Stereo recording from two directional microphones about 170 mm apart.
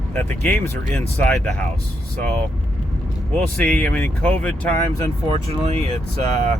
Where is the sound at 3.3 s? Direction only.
5° left (ahead or behind).